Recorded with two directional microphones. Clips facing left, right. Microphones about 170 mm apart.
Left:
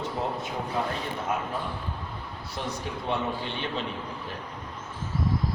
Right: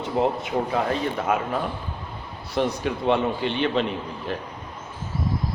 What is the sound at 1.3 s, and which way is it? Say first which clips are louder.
Speech: right 6 dB; 80° right.